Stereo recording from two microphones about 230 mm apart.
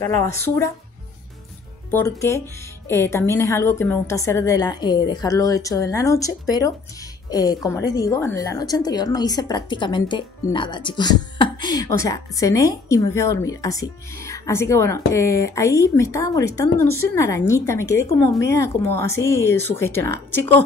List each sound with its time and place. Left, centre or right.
0.0 s a woman's voice: centre
1.9 s a woman's voice: centre